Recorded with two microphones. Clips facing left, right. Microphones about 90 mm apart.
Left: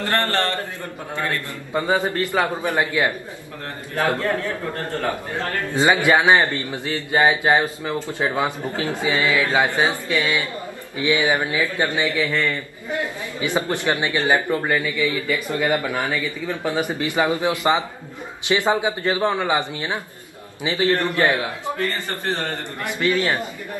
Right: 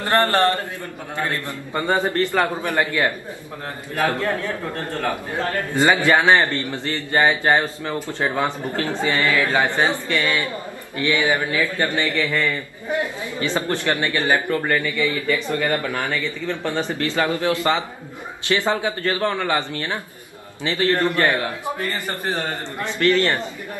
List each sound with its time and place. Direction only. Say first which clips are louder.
0.0 s a man's voice: right 4 dB; 20° right (ahead or behind)
1.7 s a man's voice: even; 10° left (ahead or behind)
5.8 s a man's voice: even; 15° left (ahead or behind)
12.2 s a man's voice: right 1 dB; centre (ahead or behind)
13.4 s a man's voice: even; 15° left (ahead or behind)
21.6 s a man's voice: left 1 dB; 15° right (ahead or behind)
22.8 s a man's voice: right 2 dB; 10° left (ahead or behind)